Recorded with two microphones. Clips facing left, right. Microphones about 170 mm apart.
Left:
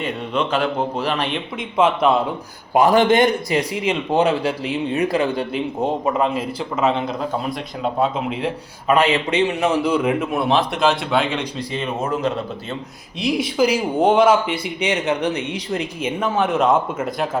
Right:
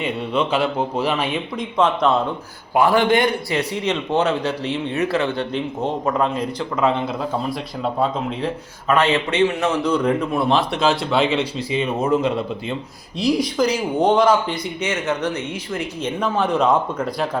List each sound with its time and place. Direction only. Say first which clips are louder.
0.0 s speech: right 1 dB; 10° right (ahead or behind)
1.7 s speech: left 2 dB; 10° left (ahead or behind)
2.9 s a man's voice: left 2 dB; 20° left (ahead or behind); by 7.3 s 5° left (ahead or behind)
8.9 s a man's voice: left 1 dB; 15° left (ahead or behind); by 11.9 s 5° right (ahead or behind)
13.1 s speech: even; centre (ahead or behind)